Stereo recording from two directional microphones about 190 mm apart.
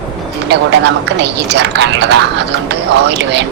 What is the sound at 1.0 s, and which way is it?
Speech, 65° right (ahead or behind).